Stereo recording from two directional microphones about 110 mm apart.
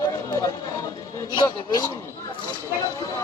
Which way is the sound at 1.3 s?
45° left (ahead or behind).